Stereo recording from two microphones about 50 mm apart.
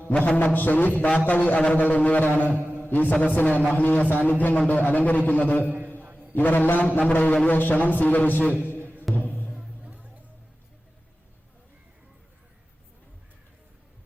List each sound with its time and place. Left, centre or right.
0.1 s music: left
0.4 s a man's voice: left
5.6 s a sound: right
6.3 s a man's voice: left
8.6 s music: left
9.6 s music: right